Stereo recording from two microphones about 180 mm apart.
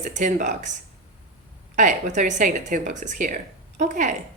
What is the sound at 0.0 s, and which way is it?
Speech, 45° right (ahead or behind).